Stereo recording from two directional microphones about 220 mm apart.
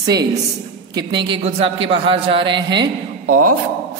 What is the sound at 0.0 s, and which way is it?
A man's voice, 15° right (ahead or behind).